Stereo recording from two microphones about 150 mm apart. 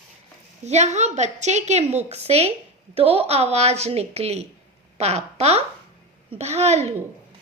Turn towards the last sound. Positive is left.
turn(degrees=-45)  # may be behind; listen again after turning